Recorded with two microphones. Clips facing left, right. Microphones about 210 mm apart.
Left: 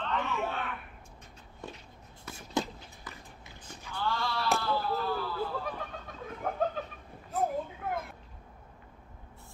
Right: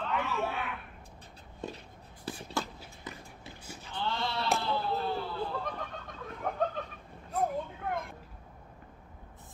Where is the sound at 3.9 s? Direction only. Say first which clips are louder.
Left 1 dB; 20° right (ahead or behind).